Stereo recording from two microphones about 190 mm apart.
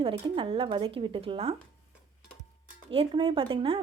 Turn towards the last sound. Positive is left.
turn(degrees=-30)  # may be behind; listen again after turning